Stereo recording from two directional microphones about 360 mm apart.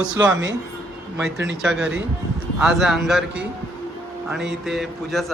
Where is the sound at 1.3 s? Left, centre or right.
Right.